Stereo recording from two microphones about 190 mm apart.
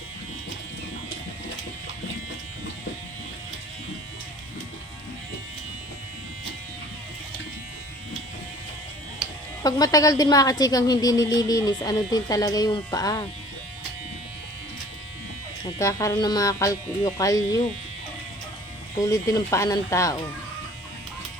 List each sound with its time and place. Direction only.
9.6 s a woman's voice: 20° left (ahead or behind)
15.8 s speech: 15° left (ahead or behind)
18.9 s speech: 15° left (ahead or behind)